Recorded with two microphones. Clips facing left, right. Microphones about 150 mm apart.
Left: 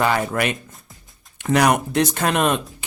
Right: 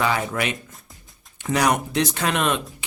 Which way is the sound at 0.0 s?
55° left (ahead or behind).